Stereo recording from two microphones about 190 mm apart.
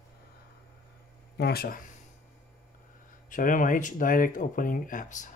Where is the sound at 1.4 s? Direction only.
55° left (ahead or behind).